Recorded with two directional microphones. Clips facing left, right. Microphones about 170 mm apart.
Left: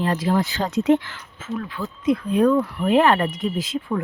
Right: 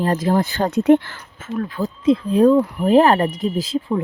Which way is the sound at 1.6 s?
40° right (ahead or behind).